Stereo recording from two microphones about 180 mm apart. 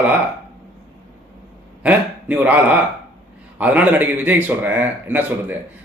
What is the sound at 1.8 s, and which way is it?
Speech, 10° right (ahead or behind).